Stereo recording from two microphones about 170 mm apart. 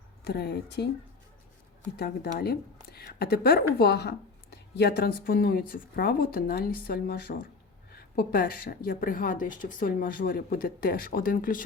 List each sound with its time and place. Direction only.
0.3 s speech: 70° left (ahead or behind)
2.0 s a woman's voice: 65° left (ahead or behind)